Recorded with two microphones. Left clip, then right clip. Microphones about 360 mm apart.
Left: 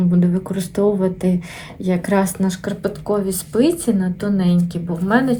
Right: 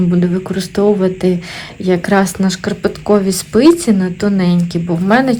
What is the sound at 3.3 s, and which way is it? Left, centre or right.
Speech, right.